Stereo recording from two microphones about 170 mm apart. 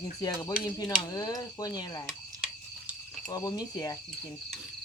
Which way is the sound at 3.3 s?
20° left (ahead or behind).